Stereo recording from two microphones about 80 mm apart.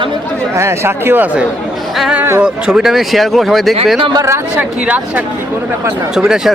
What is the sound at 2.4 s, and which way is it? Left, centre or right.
Speech, centre.